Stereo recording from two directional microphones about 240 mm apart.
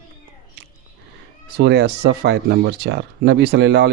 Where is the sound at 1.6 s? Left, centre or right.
Right.